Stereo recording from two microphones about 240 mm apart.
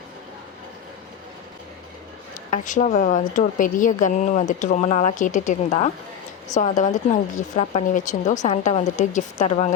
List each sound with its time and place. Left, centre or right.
2.5 s speech: left